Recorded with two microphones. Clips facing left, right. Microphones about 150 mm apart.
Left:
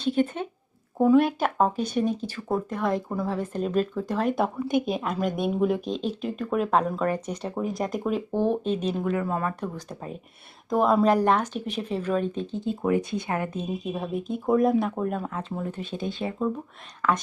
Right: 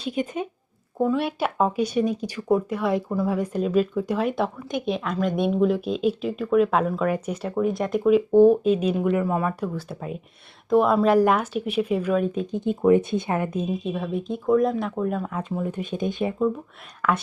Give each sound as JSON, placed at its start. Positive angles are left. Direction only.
{"t": 0.0, "sound": "speech", "side_deg": -10}
{"t": 0.9, "sound": "speech", "side_deg": 5}
{"t": 13.8, "sound": "speech", "side_deg": 0}
{"t": 15.6, "sound": "speech", "side_deg": -15}